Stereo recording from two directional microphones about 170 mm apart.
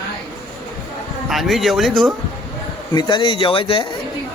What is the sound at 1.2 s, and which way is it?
Speech, centre (ahead or behind).